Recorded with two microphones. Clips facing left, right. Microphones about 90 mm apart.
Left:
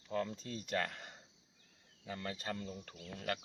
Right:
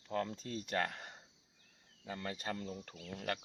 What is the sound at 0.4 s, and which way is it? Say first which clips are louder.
Speech: right 1 dB; 35° right (ahead or behind).